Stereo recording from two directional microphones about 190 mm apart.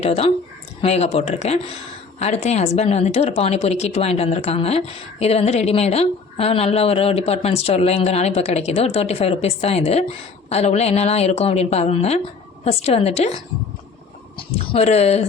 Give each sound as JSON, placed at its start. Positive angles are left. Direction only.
{"t": 0.0, "sound": "a woman's voice", "side_deg": 35}
{"t": 14.3, "sound": "a woman's voice", "side_deg": 30}